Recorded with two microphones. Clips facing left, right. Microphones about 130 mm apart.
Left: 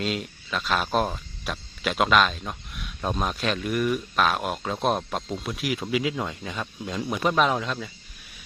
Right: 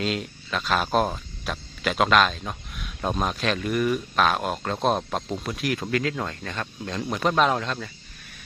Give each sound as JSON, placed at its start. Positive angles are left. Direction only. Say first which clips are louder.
{"t": 0.0, "sound": "speech", "louder": "right 1 dB", "side_deg": 0}